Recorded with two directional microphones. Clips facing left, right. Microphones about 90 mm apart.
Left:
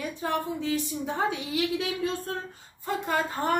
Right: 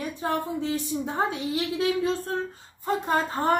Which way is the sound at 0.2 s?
30° right (ahead or behind).